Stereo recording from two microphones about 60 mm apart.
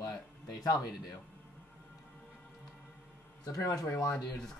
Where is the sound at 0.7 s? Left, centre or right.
Left.